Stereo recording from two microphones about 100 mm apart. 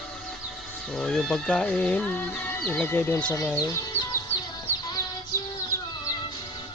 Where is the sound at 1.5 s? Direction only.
15° left (ahead or behind).